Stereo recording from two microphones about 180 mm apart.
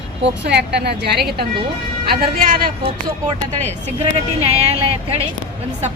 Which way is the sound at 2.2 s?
50° right (ahead or behind).